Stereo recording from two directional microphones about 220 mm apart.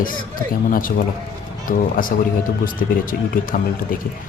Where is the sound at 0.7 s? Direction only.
40° left (ahead or behind).